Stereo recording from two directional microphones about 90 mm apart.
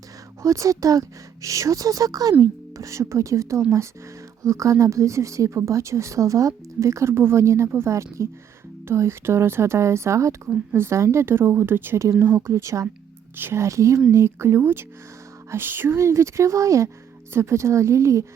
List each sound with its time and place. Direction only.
0.4 s a woman's voice: 35° right (ahead or behind)
10.5 s a woman's voice: 25° right (ahead or behind)